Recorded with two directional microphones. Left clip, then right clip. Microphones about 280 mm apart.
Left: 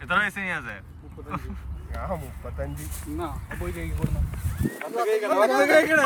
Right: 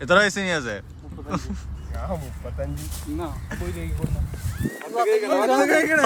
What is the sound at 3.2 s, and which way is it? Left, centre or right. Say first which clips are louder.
Speech: left 2 dB; centre.